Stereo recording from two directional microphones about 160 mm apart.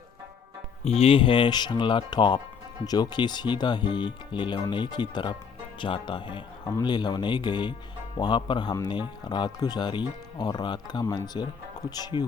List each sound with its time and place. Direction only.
0.9 s speech: 40° left (ahead or behind)
11.0 s speech: 15° left (ahead or behind)